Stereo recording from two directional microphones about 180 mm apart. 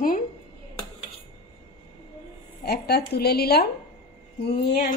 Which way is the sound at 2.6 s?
60° left (ahead or behind).